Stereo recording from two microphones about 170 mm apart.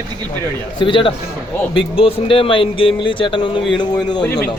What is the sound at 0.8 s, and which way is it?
A man's voice, 30° left (ahead or behind).